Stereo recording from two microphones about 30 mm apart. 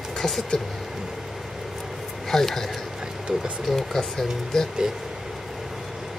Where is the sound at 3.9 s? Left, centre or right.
Centre.